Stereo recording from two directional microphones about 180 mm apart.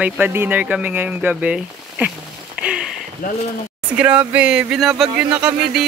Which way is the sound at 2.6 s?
5° right (ahead or behind).